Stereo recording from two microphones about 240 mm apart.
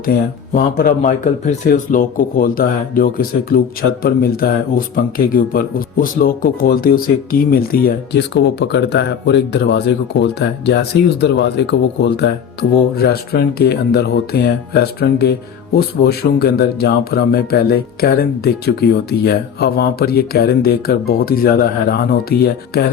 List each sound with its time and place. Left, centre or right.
0.5 s speech: left